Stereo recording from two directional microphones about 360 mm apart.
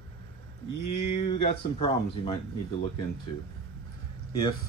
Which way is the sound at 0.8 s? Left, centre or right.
Left.